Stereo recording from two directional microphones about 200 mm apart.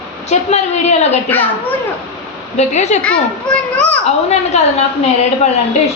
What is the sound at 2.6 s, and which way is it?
Speech, 35° left (ahead or behind).